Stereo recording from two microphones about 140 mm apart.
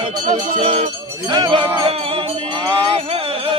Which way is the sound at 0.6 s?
45° right (ahead or behind).